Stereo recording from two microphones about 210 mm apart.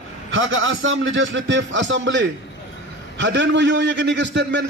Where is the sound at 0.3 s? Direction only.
65° right (ahead or behind).